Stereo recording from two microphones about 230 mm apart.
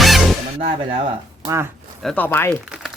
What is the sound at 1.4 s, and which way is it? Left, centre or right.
Speech, centre.